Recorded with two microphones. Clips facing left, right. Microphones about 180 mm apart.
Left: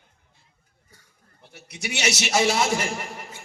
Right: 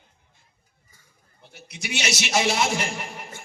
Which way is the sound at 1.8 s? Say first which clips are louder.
Left 2 dB; 65° left (ahead or behind).